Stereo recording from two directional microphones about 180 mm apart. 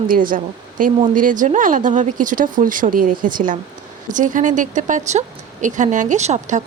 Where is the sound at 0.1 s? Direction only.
50° right (ahead or behind).